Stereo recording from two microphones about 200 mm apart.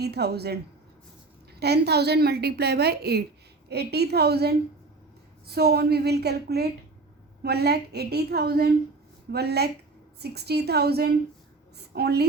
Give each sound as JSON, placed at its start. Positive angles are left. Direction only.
{"t": 0.0, "sound": "a woman's voice", "side_deg": -55}